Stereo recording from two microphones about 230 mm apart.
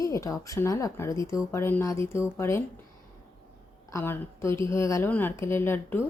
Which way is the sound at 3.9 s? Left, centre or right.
Centre.